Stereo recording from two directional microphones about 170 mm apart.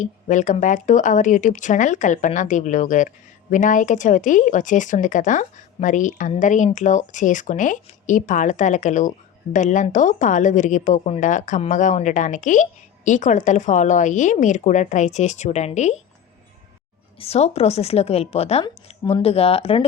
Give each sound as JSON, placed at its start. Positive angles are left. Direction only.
{"t": 0.0, "sound": "speech", "side_deg": 45}
{"t": 17.2, "sound": "a woman's voice", "side_deg": 35}